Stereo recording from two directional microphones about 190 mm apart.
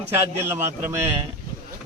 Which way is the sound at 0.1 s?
15° right (ahead or behind).